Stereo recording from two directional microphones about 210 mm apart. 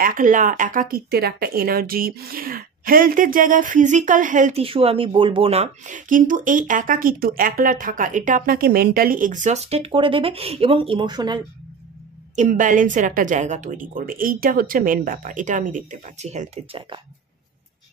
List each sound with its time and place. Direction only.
0.0 s speech: 40° right (ahead or behind); by 11.4 s 20° right (ahead or behind)
12.4 s speech: 40° right (ahead or behind)